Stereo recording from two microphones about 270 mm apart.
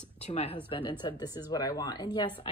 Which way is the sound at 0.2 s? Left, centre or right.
Left.